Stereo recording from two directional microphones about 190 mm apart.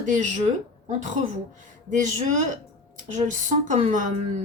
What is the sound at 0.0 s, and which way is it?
Speech, 40° right (ahead or behind).